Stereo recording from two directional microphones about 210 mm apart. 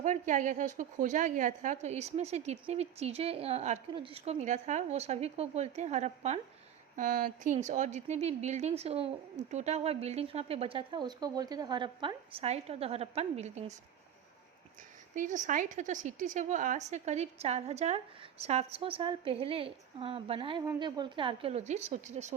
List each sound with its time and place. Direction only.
0.0 s a woman's voice: 35° right (ahead or behind)
15.1 s a woman's voice: 35° right (ahead or behind)